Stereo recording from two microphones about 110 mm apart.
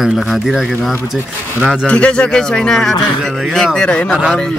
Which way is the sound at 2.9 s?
45° left (ahead or behind).